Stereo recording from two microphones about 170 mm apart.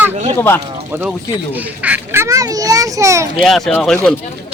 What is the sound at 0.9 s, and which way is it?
A child's voice, 10° right (ahead or behind).